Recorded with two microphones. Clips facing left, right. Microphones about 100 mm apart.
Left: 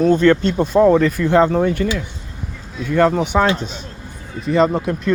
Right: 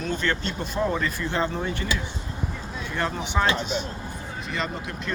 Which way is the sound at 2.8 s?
60° left (ahead or behind).